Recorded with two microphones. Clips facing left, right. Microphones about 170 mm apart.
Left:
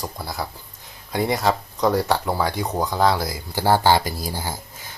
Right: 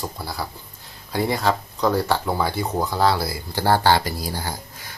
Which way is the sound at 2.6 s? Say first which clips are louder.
Even; 15° left (ahead or behind).